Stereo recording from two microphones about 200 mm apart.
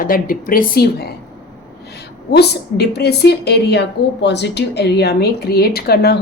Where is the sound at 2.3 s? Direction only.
55° left (ahead or behind).